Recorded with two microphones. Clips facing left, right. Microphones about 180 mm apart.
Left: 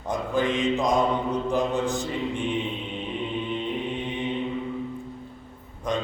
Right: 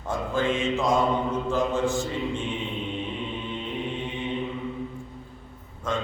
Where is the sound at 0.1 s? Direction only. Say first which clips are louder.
Left 1 dB; 15° left (ahead or behind).